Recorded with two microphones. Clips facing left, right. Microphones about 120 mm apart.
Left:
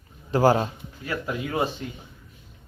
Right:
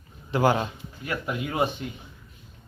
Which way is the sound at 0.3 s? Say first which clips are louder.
Left 3 dB; 35° left (ahead or behind).